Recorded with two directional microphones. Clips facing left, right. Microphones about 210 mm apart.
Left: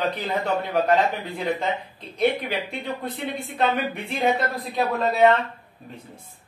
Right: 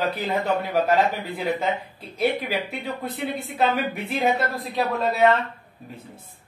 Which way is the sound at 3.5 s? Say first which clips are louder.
Even; 5° right (ahead or behind).